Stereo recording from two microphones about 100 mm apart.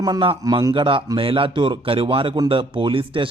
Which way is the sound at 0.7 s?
55° right (ahead or behind).